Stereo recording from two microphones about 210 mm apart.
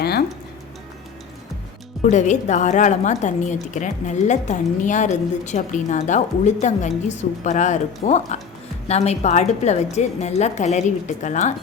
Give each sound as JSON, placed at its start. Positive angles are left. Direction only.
{"t": 0.0, "sound": "music", "side_deg": 50}
{"t": 2.0, "sound": "a woman's voice", "side_deg": 35}